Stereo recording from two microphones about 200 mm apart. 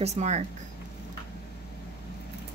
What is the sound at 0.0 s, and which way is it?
Speech, 35° right (ahead or behind).